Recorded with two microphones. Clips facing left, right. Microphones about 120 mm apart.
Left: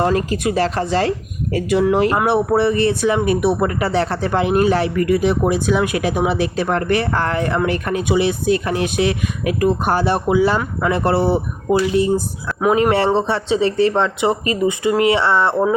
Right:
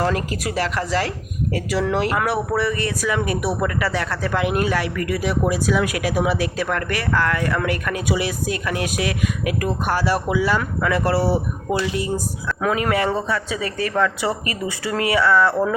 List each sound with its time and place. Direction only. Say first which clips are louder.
0.0 s speech: left 5 dB; 25° left (ahead or behind)